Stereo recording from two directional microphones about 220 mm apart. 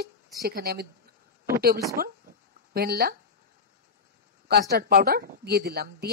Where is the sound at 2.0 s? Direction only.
40° right (ahead or behind).